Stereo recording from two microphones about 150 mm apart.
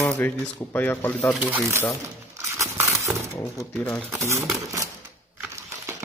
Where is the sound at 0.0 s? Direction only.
15° left (ahead or behind).